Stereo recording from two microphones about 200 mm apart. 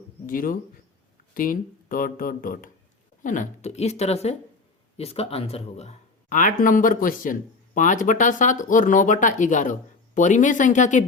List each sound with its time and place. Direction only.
0.3 s a man's voice: 45° left (ahead or behind)